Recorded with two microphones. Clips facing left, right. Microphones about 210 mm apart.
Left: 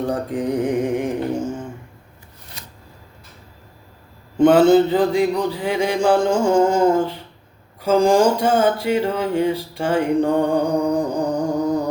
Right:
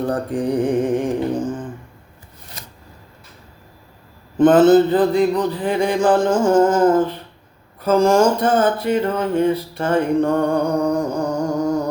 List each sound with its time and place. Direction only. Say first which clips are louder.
0.1 s mantra: right 1 dB; 10° left (ahead or behind)
2.6 s shuffling cards: right 2 dB; 45° right (ahead or behind)
4.4 s mantra: right 1 dB; 10° left (ahead or behind)
10.9 s music: even; 15° left (ahead or behind)